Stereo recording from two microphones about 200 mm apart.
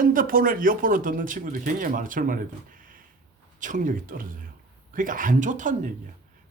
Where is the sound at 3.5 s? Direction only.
40° right (ahead or behind).